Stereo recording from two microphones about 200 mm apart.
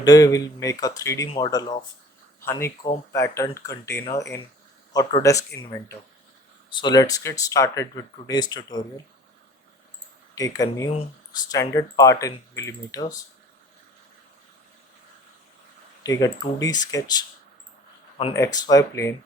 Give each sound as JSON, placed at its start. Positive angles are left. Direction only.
{"t": 0.0, "sound": "speech", "side_deg": 20}
{"t": 10.3, "sound": "speech", "side_deg": 15}
{"t": 16.0, "sound": "speech", "side_deg": 15}
{"t": 18.3, "sound": "speech", "side_deg": 20}